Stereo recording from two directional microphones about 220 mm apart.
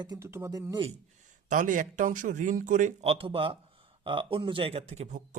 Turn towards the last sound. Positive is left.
turn(degrees=-30)  # may be behind; listen again after turning